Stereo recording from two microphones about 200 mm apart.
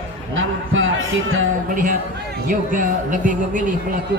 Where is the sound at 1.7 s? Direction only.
40° right (ahead or behind).